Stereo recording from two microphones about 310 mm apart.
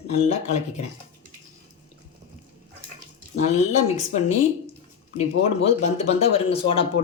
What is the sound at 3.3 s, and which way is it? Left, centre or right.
Speech, left.